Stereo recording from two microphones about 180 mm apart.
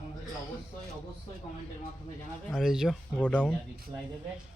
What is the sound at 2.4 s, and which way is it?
Speech, centre (ahead or behind).